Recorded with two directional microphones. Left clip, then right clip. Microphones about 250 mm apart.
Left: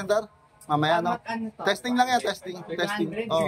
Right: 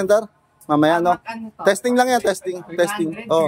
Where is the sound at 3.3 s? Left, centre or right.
Right.